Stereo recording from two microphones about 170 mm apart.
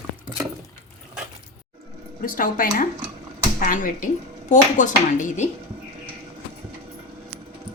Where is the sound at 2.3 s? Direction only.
55° left (ahead or behind).